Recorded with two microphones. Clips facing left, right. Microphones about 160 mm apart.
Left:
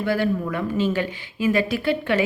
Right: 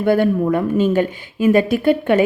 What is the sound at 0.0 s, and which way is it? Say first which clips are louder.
A woman's voice: right 7 dB; 50° right (ahead or behind).